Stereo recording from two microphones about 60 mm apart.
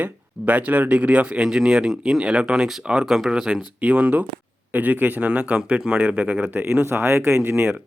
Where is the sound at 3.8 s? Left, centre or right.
Right.